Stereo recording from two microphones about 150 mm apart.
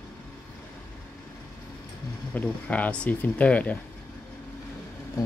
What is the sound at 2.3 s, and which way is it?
Speech, 10° left (ahead or behind).